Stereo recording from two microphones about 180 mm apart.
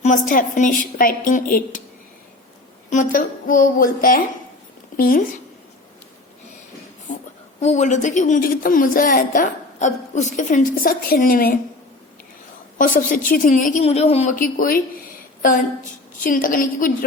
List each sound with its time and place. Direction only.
0.0 s speech: 45° left (ahead or behind)
2.9 s speech: 45° left (ahead or behind)
7.6 s speech: 40° left (ahead or behind)
12.8 s speech: 45° left (ahead or behind)